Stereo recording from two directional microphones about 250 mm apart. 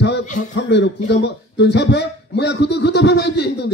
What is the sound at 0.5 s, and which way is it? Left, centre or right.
A man's voice, left.